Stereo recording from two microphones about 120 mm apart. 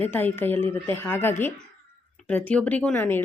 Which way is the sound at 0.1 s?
15° left (ahead or behind).